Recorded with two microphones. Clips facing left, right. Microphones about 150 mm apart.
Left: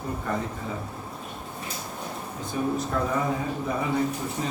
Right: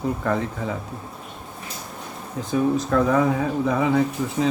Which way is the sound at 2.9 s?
90° right.